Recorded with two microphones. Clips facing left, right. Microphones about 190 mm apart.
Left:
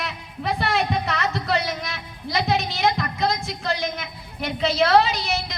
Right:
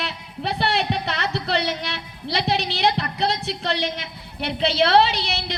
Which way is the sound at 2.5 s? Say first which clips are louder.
Even; 70° right (ahead or behind).